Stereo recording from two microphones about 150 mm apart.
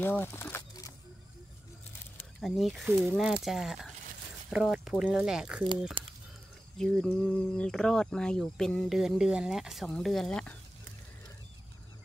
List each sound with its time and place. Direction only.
0.0 s a sound: 15° left (ahead or behind)
2.4 s speech: centre (ahead or behind)
6.8 s speech: centre (ahead or behind)